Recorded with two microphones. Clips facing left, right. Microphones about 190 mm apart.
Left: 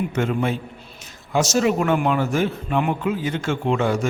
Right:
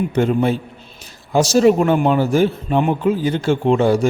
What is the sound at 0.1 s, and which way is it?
A man's voice, 35° right (ahead or behind).